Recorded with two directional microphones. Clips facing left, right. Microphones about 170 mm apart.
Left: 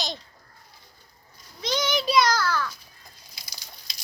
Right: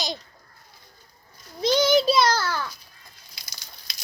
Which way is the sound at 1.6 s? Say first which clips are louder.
Right 7 dB; 30° right (ahead or behind).